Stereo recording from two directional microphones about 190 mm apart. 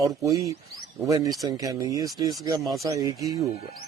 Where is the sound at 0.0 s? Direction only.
15° right (ahead or behind).